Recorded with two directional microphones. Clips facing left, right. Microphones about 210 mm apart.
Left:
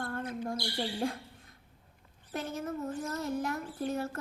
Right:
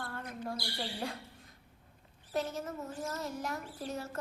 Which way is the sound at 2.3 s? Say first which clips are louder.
Right 1 dB; 55° left (ahead or behind).